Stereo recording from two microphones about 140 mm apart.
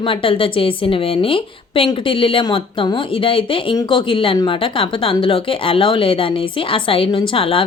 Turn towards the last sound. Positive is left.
turn(degrees=40)  # may be behind; listen again after turning